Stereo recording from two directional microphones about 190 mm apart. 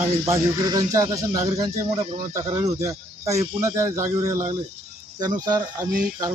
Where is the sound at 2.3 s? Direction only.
20° right (ahead or behind).